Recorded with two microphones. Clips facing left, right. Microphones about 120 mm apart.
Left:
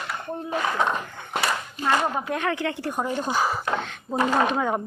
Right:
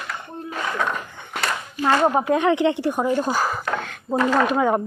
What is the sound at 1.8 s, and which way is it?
Speech, 45° right (ahead or behind).